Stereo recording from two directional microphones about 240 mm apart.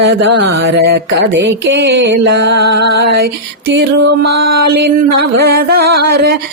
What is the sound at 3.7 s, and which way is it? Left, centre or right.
Music, right.